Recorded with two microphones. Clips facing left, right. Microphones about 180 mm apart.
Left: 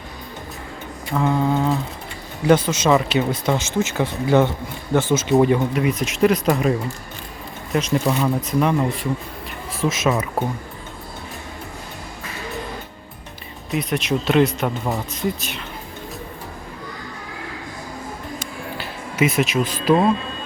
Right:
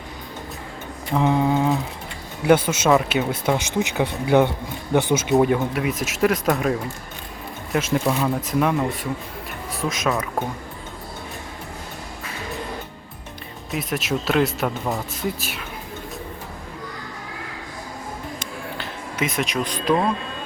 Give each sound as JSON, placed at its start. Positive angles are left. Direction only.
{"t": 1.1, "sound": "speech", "side_deg": -20}
{"t": 5.3, "sound": "speech", "side_deg": 0}
{"t": 13.7, "sound": "speech", "side_deg": 0}
{"t": 18.8, "sound": "speech", "side_deg": 5}